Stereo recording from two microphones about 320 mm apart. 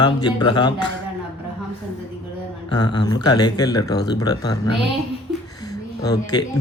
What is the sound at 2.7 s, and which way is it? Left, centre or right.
Speech, centre.